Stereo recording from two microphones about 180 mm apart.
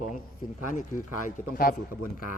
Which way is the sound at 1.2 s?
50° left (ahead or behind).